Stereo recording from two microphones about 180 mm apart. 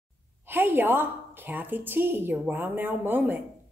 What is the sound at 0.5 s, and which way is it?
A woman's voice, 10° right (ahead or behind).